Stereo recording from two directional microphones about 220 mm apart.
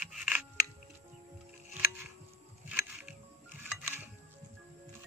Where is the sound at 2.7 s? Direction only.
5° right (ahead or behind).